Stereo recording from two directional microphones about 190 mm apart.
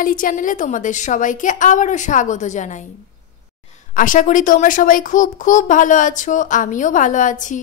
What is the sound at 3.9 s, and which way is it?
Speech, 45° left (ahead or behind).